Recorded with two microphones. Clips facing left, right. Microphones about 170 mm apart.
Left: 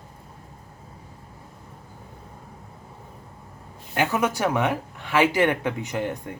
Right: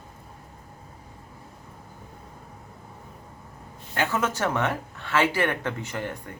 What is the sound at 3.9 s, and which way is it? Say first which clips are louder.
A man's voice: left 3 dB; 15° left (ahead or behind).